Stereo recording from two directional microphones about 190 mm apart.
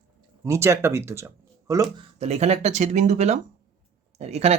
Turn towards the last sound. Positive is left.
turn(degrees=-35)  # may be behind; listen again after turning